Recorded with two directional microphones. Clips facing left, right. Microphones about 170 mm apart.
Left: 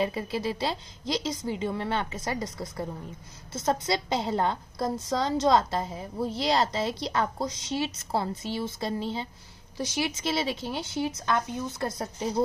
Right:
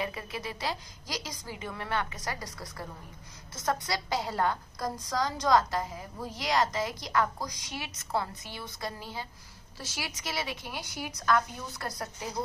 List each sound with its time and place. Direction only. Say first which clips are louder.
0.0 s a woman's voice: left 7 dB; 30° left (ahead or behind)